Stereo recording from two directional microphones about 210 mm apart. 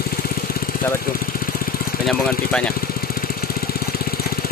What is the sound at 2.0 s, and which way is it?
Speech, 5° left (ahead or behind).